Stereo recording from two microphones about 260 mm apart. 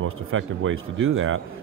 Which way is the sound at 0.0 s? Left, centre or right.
Right.